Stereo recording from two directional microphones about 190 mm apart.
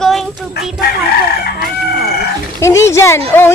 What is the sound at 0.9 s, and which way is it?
Chicken, 60° left (ahead or behind).